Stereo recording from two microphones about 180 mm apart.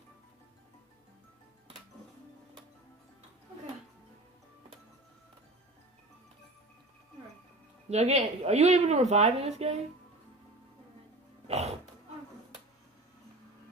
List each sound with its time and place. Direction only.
7.9 s a woman's voice: 40° right (ahead or behind)
11.4 s dog: 35° right (ahead or behind)